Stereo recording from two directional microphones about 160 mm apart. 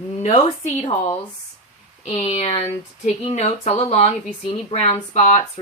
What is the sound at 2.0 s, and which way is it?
Speech, 40° left (ahead or behind).